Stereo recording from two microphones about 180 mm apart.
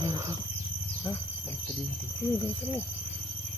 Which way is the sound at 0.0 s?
20° right (ahead or behind).